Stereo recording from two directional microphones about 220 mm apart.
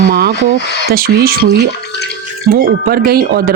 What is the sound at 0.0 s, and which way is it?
Speech, 40° right (ahead or behind).